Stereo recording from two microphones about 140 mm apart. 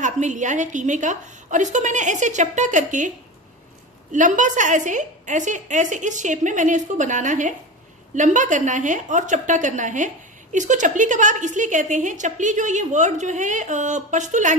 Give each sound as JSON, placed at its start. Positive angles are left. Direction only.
{"t": 0.0, "sound": "a woman's voice", "side_deg": -60}
{"t": 4.1, "sound": "a woman's voice", "side_deg": -65}